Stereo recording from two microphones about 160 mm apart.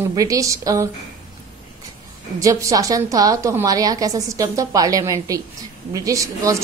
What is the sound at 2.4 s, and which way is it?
A woman's voice, 20° right (ahead or behind).